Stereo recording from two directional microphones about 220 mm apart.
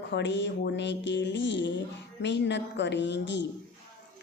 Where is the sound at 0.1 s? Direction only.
55° left (ahead or behind).